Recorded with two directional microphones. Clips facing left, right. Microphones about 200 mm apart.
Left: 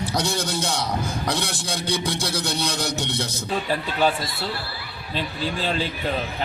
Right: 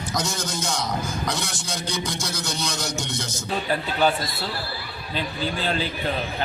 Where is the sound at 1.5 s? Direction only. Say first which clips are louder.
Left 3 dB; 55° left (ahead or behind).